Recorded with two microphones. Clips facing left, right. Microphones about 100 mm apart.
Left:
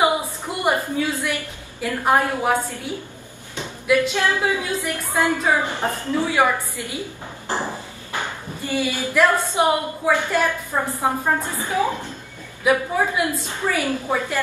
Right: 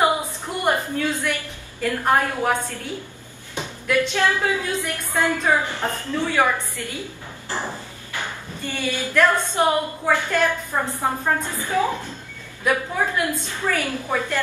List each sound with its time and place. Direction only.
0.7 s a woman's voice: 15° left (ahead or behind)
8.2 s a woman's voice: 10° left (ahead or behind)
11.5 s a woman's voice: 20° left (ahead or behind)